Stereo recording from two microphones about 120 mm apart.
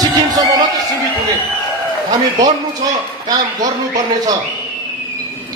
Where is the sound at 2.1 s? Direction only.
35° right (ahead or behind).